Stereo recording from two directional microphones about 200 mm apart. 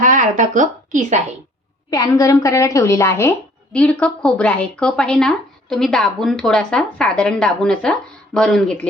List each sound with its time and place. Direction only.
0.0 s speech: 40° right (ahead or behind)
1.9 s a woman's voice: 15° left (ahead or behind)